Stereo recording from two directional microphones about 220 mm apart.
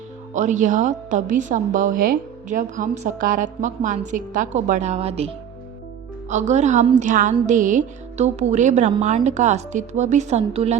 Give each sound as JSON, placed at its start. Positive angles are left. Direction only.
{"t": 0.3, "sound": "a woman's voice", "side_deg": -35}